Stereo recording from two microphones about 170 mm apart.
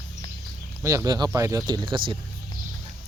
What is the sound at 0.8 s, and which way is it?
Speech, 20° right (ahead or behind).